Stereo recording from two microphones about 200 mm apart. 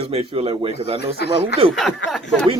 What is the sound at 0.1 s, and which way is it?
Speech, 30° right (ahead or behind).